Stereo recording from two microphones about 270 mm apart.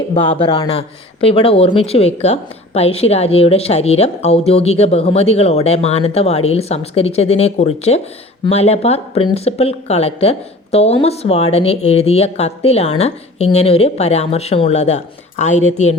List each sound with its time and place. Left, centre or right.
0.1 s speech: centre